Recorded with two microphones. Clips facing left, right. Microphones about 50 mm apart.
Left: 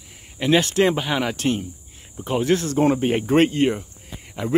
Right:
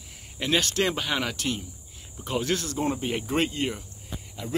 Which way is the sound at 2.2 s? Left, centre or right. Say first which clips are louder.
Left 7 dB; left.